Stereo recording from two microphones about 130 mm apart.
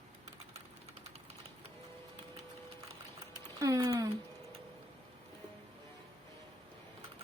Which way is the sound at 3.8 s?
25° right (ahead or behind).